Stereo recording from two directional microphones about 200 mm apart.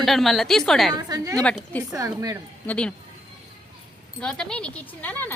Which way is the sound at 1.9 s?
15° right (ahead or behind).